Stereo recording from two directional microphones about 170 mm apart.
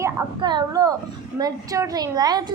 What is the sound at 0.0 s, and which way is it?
A woman's voice, 20° right (ahead or behind).